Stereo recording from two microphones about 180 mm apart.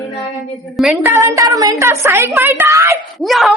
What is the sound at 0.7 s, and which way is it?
Speech, centre (ahead or behind).